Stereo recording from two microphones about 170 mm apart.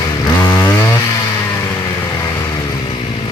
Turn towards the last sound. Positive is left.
turn(degrees=30)  # may be behind; listen again after turning